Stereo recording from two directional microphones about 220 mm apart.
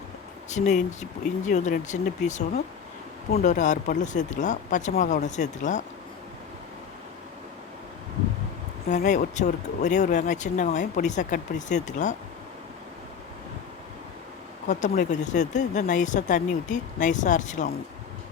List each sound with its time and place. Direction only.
0.5 s speech: 35° left (ahead or behind)
8.9 s speech: 35° left (ahead or behind)
14.7 s speech: 35° left (ahead or behind)